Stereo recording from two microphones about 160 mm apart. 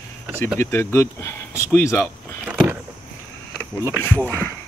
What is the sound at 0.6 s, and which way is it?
Speech, 15° left (ahead or behind).